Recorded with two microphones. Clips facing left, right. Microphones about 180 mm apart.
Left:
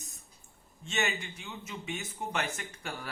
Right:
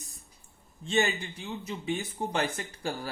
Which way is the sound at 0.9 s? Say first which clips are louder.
Right 6 dB; 30° right (ahead or behind).